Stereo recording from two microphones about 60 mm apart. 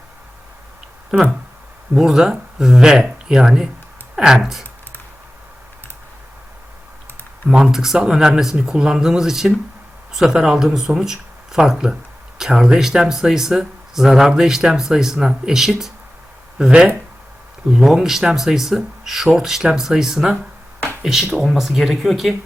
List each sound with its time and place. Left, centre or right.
2.0 s speech: centre
7.5 s speech: centre